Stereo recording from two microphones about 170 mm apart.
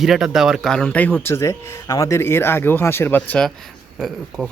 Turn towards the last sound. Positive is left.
turn(degrees=0)  # may be behind; listen again after turning